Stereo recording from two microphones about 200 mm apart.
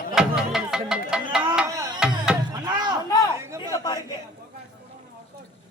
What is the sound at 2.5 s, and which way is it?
Chop, 20° right (ahead or behind).